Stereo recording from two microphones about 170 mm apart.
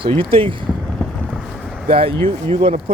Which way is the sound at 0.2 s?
30° right (ahead or behind).